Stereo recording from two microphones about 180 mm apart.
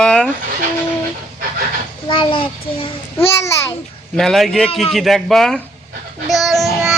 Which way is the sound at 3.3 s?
15° left (ahead or behind).